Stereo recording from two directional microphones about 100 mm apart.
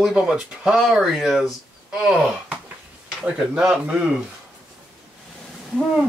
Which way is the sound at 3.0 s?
5° right (ahead or behind).